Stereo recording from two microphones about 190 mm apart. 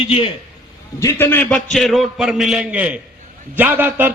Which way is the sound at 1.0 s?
15° left (ahead or behind).